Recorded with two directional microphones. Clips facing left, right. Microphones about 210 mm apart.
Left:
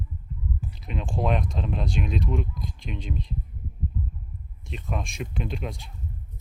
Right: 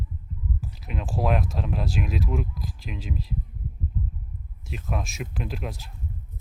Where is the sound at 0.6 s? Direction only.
Centre (ahead or behind).